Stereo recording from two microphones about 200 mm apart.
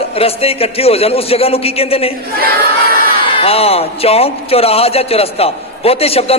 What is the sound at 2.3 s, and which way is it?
Battle cry, 50° right (ahead or behind).